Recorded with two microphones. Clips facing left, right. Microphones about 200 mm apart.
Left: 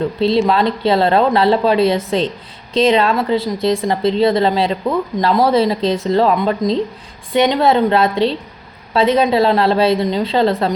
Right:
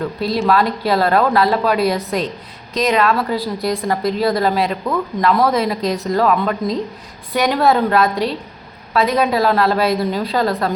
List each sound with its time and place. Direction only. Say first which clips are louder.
0.0 s speech: left 4 dB; 25° left (ahead or behind)